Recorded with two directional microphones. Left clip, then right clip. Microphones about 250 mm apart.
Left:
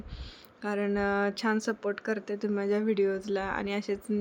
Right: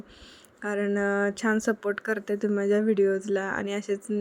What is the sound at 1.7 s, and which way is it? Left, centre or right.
Speech, right.